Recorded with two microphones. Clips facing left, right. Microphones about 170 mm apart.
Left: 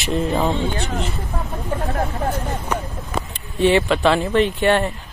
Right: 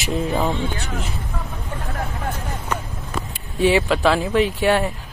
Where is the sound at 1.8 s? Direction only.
40° left (ahead or behind).